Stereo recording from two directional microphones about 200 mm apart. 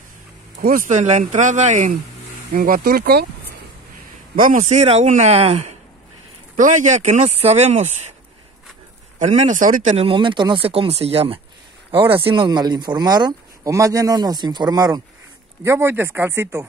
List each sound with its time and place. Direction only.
0.6 s speech: 45° right (ahead or behind)
4.4 s speech: 40° right (ahead or behind)
9.2 s speech: 35° right (ahead or behind); by 16.6 s 10° right (ahead or behind)